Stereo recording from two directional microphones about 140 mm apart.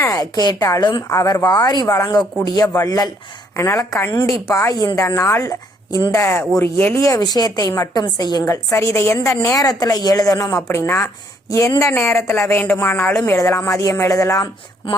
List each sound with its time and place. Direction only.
0.0 s a woman's voice: 25° left (ahead or behind)